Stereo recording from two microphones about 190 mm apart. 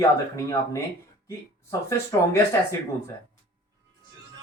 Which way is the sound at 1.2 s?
15° left (ahead or behind).